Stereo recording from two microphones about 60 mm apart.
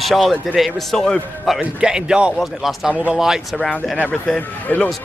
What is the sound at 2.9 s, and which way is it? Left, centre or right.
Speech, centre.